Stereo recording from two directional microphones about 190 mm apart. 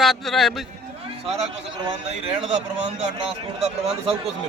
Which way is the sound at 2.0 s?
30° right (ahead or behind).